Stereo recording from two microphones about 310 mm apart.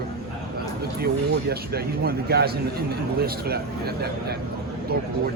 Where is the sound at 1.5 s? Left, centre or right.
Right.